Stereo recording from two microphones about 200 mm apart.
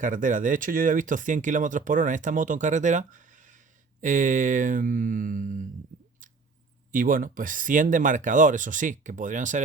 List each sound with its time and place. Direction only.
0.0 s speech: 40° right (ahead or behind)
6.9 s speech: 40° right (ahead or behind)